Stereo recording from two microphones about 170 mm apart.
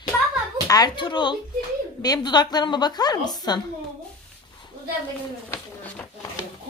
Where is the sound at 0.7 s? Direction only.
25° left (ahead or behind).